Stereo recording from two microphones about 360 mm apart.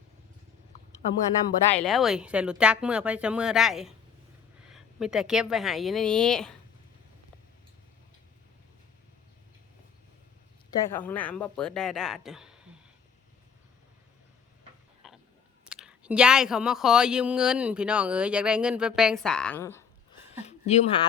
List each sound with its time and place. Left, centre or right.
1.7 s a woman's voice: centre
10.7 s speech: centre
15.0 s a sound: centre
15.7 s speech: centre
20.4 s a woman's voice: centre